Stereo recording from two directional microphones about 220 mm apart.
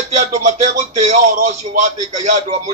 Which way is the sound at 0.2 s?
35° right (ahead or behind).